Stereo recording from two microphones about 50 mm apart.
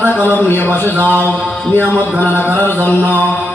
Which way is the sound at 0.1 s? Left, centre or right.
Left.